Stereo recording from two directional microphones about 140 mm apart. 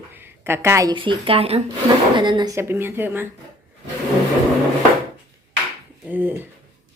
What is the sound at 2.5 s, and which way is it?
Speech, 15° right (ahead or behind).